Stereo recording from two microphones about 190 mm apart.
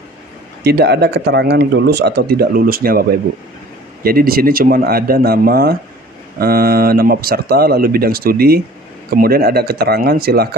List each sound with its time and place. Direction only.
0.7 s speech: 60° right (ahead or behind)